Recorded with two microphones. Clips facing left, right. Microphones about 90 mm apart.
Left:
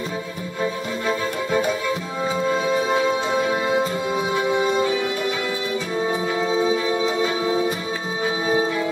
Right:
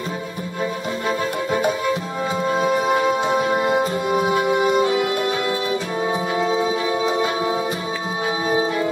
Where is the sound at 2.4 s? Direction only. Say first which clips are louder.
Right 3 dB; 10° right (ahead or behind).